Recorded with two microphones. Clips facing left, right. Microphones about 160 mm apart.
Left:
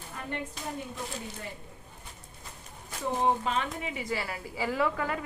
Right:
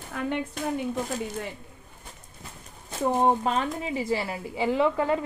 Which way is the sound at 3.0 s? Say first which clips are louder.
Right 5 dB; 45° right (ahead or behind).